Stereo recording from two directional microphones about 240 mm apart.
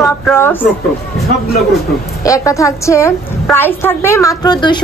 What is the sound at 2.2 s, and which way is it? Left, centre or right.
A woman's voice, centre.